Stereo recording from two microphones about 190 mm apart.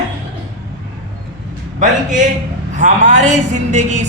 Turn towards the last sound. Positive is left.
turn(degrees=-40)  # may be behind; listen again after turning